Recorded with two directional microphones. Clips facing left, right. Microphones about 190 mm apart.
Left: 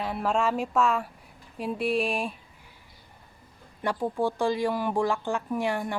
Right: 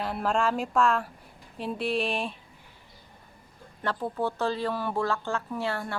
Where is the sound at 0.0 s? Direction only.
Centre (ahead or behind).